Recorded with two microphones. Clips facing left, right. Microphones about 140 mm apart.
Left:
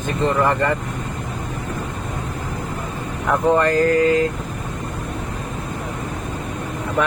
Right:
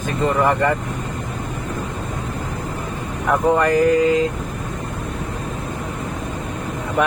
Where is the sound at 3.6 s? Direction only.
15° right (ahead or behind).